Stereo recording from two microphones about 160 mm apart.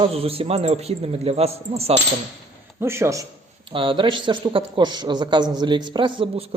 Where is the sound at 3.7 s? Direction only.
30° right (ahead or behind).